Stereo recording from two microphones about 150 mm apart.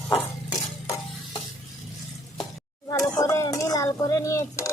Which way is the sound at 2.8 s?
20° left (ahead or behind).